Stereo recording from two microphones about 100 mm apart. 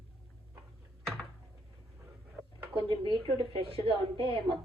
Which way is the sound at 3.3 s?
65° right (ahead or behind).